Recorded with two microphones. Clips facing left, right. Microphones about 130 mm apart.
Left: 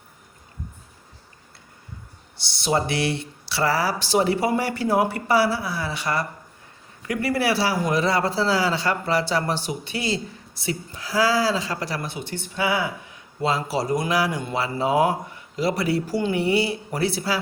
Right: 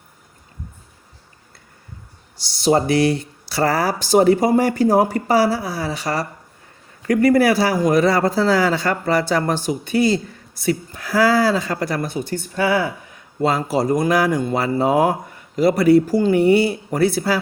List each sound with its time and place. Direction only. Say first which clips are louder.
2.4 s a man's voice: right 6 dB; 40° right (ahead or behind)